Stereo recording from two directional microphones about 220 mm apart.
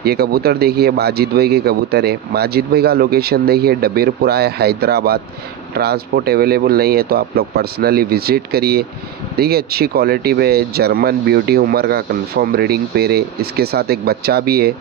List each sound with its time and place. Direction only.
0.0 s speech: 45° right (ahead or behind)